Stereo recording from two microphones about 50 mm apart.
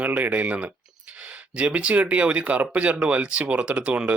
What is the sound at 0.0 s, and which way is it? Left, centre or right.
Speech, right.